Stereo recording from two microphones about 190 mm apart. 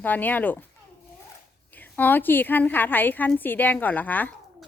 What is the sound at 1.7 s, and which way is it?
A woman's voice, 10° left (ahead or behind).